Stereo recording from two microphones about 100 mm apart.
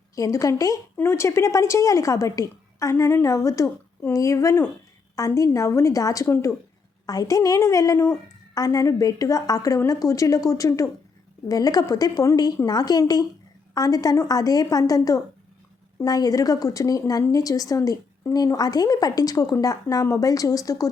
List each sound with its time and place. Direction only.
0.2 s a woman's voice: 35° left (ahead or behind)